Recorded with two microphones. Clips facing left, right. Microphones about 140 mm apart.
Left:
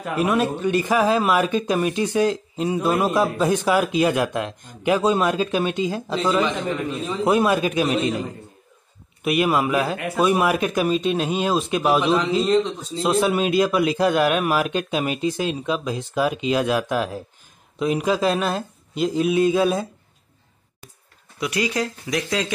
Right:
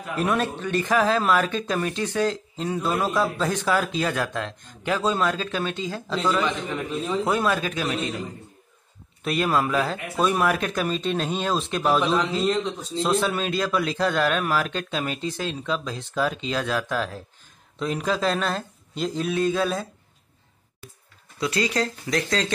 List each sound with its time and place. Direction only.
0.2 s speech: 5° left (ahead or behind)
9.2 s speech: 15° left (ahead or behind)
21.4 s speech: 15° left (ahead or behind)